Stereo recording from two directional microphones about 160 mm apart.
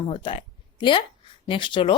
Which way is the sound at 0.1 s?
35° left (ahead or behind).